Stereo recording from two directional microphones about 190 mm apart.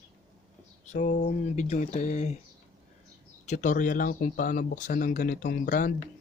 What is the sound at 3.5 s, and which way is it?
Speech, 40° left (ahead or behind).